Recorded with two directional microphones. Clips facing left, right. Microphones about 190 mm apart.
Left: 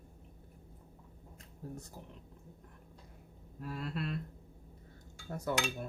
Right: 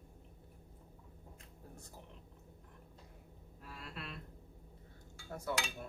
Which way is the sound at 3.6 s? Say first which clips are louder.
Left 10 dB; 45° left (ahead or behind).